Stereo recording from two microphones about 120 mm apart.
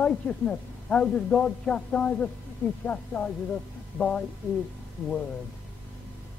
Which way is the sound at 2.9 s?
20° left (ahead or behind).